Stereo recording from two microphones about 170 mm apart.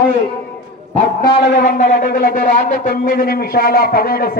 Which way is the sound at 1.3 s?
90° left.